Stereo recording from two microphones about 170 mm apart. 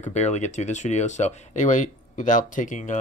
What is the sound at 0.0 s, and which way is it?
Speech, 40° left (ahead or behind).